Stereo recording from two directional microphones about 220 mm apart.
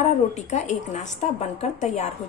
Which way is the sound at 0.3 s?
35° left (ahead or behind).